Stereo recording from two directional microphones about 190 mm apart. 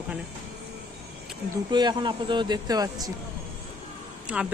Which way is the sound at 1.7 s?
25° right (ahead or behind).